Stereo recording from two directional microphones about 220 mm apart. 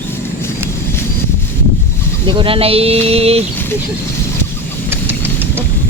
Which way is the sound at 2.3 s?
25° right (ahead or behind).